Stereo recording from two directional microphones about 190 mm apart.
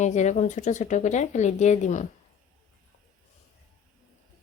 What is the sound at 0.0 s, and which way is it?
Speech, 40° left (ahead or behind).